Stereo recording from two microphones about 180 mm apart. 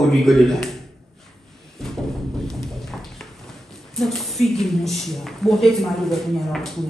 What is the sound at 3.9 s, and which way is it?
Speech, centre (ahead or behind).